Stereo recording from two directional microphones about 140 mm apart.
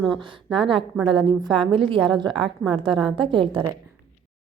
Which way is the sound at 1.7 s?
40° right (ahead or behind).